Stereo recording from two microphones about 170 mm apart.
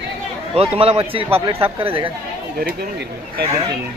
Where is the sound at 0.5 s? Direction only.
35° right (ahead or behind).